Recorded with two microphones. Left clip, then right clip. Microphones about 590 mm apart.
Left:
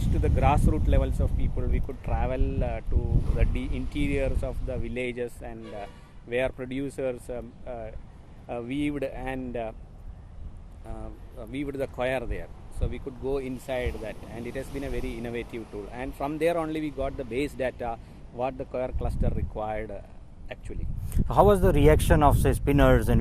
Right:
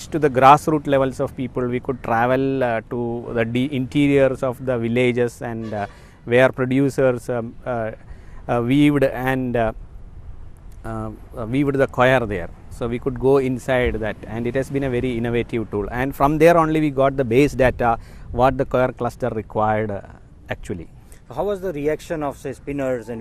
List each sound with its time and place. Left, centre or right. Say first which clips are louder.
0.1 s speech: right 14 dB; right
10.8 s speech: right 13 dB; right
21.2 s speech: left 4 dB; left